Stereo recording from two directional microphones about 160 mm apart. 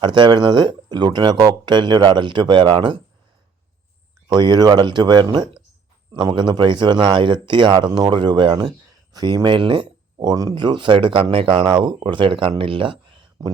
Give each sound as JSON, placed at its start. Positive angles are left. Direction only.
{"t": 0.0, "sound": "speech", "side_deg": -30}
{"t": 4.3, "sound": "speech", "side_deg": -25}